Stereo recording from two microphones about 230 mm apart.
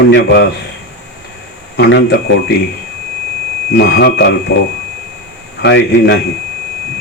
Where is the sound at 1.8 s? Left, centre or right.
Left.